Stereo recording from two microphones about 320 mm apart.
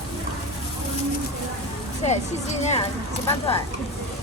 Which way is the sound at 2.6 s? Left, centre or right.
Left.